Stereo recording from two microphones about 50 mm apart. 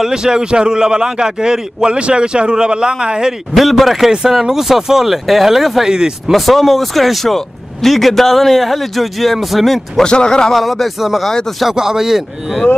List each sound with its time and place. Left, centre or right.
0.0 s a man's voice: centre
3.5 s a man's voice: centre
6.3 s speech: centre
10.0 s speech: centre
10.5 s a man's voice: centre